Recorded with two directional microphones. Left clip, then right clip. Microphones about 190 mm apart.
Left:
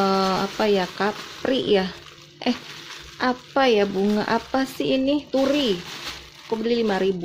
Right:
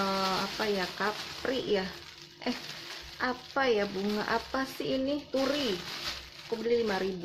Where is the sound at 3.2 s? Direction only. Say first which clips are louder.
Left 9 dB; 50° left (ahead or behind).